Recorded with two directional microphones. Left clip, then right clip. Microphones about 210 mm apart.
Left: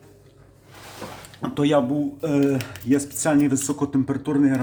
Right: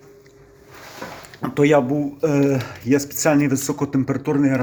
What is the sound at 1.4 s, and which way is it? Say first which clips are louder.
Speech: right 4 dB; 5° right (ahead or behind).